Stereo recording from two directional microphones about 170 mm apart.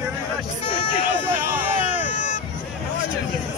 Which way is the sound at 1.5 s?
10° right (ahead or behind).